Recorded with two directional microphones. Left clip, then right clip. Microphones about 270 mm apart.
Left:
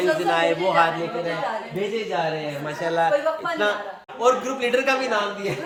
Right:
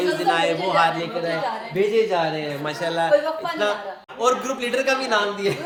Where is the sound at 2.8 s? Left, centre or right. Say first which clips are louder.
Right 1 dB; centre.